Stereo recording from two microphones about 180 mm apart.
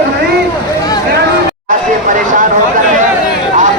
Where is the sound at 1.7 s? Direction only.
45° right (ahead or behind).